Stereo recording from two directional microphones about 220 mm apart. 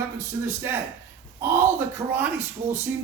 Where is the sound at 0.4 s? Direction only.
10° right (ahead or behind).